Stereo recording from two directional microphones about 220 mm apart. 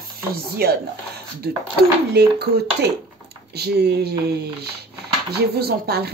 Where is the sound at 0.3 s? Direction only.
45° right (ahead or behind).